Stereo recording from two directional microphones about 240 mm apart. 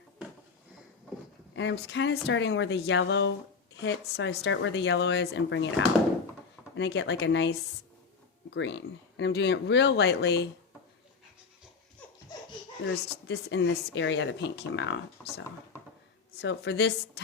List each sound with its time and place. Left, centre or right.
1.5 s speech: left
12.8 s speech: left